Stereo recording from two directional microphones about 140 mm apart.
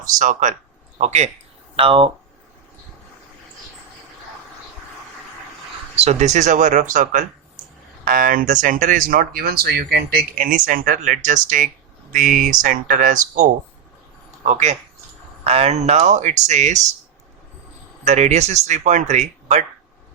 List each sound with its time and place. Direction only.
0.2 s speech: 60° right (ahead or behind)
1.7 s speech: 40° right (ahead or behind)
6.0 s speech: 55° right (ahead or behind)
14.3 s a sound: 60° right (ahead or behind)
15.4 s speech: 50° right (ahead or behind)
18.0 s speech: 55° right (ahead or behind)